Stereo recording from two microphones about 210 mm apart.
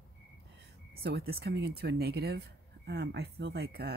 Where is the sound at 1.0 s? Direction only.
50° right (ahead or behind).